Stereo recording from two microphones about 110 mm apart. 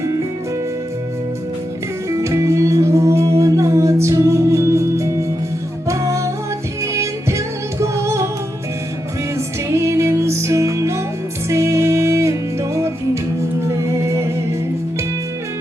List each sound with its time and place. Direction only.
2.0 s music: 25° right (ahead or behind)
9.6 s music: 25° right (ahead or behind)